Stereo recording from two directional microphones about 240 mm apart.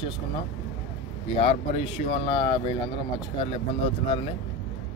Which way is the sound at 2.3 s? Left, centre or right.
Left.